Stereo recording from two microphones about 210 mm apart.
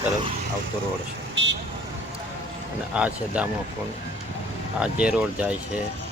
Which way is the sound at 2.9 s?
5° right (ahead or behind).